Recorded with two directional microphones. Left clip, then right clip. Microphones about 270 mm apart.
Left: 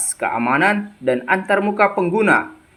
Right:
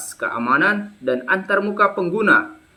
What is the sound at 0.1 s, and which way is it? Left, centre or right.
Speech, centre.